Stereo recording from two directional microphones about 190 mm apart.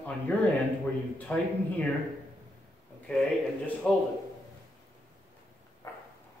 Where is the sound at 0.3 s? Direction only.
10° left (ahead or behind).